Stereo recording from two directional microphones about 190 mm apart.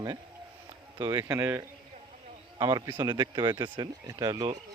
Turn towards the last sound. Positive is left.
turn(degrees=-20)  # may be behind; listen again after turning